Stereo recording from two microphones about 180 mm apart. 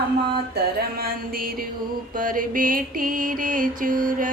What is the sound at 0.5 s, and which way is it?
Music, 60° right (ahead or behind).